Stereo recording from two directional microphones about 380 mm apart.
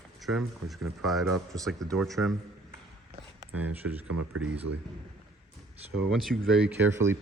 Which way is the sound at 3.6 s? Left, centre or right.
Centre.